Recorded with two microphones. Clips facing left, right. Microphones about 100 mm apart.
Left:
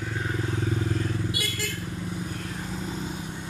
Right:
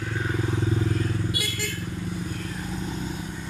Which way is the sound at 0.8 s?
Centre (ahead or behind).